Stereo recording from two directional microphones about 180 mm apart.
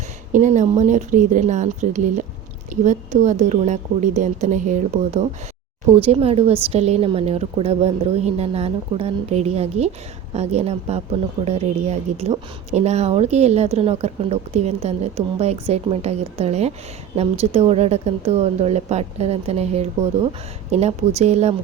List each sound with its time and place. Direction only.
0.3 s a woman's voice: 40° right (ahead or behind)
6.0 s a woman's voice: 30° right (ahead or behind)